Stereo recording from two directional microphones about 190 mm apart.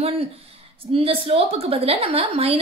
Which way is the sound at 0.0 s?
30° right (ahead or behind).